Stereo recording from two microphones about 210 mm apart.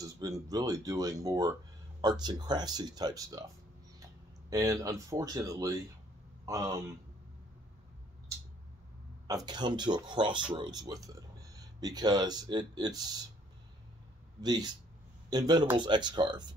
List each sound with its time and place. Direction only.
0.0 s speech: 15° right (ahead or behind)
4.5 s speech: 15° right (ahead or behind)
9.5 s speech: 20° right (ahead or behind)
14.4 s speech: 20° right (ahead or behind)